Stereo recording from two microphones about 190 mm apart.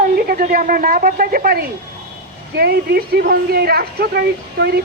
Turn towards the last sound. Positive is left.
turn(degrees=-55)  # may be behind; listen again after turning